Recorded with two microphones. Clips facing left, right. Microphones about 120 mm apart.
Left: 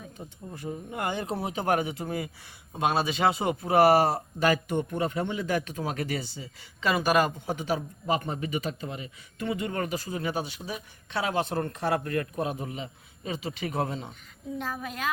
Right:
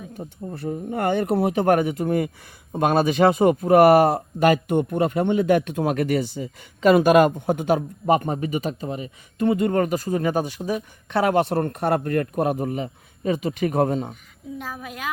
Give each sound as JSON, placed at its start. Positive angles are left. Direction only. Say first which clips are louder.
{"t": 0.7, "sound": "a man's voice", "louder": "right 9 dB", "side_deg": -50}
{"t": 14.6, "sound": "a woman's voice", "louder": "even", "side_deg": -10}